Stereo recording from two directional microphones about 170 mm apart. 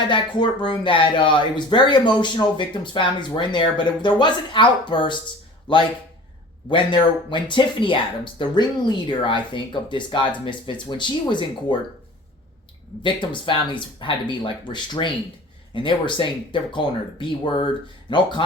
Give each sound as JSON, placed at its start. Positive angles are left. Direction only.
{"t": 0.1, "sound": "speech", "side_deg": 25}
{"t": 6.7, "sound": "speech", "side_deg": 30}
{"t": 13.0, "sound": "speech", "side_deg": 30}